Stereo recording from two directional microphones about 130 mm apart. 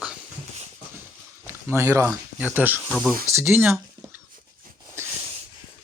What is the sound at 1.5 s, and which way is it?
Speech, 20° right (ahead or behind).